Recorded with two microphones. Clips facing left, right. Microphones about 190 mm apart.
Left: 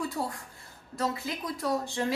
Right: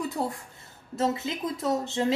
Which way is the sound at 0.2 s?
25° right (ahead or behind).